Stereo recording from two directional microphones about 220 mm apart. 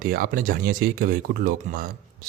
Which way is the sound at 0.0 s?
40° right (ahead or behind).